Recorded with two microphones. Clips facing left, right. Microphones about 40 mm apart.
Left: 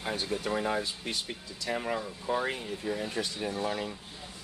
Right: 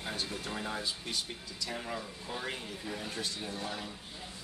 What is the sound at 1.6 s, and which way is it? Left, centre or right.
Speech, left.